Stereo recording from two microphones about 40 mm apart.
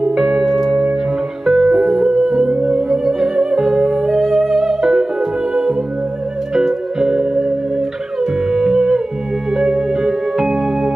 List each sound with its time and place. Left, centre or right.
0.1 s music: centre